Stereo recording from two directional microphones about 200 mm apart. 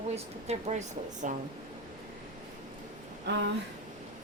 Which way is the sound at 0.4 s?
35° right (ahead or behind).